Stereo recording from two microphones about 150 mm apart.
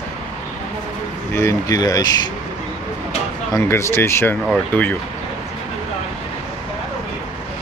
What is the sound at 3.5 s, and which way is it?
Speech, 20° left (ahead or behind).